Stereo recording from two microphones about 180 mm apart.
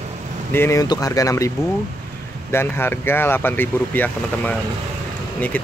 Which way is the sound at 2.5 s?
15° left (ahead or behind).